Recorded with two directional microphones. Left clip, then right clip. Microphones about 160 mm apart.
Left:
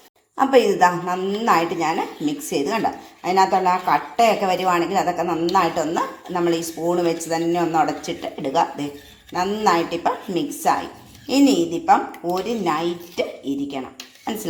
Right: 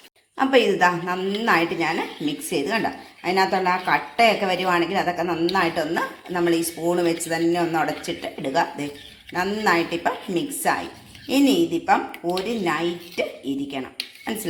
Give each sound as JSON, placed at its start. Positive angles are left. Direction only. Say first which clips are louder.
{"t": 0.3, "sound": "a woman's voice", "louder": "left 3 dB", "side_deg": 0}